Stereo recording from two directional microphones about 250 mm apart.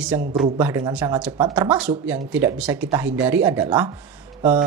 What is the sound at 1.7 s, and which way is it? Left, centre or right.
Speech, centre.